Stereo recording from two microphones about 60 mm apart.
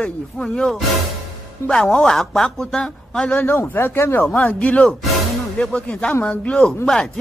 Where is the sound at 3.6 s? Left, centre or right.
Left.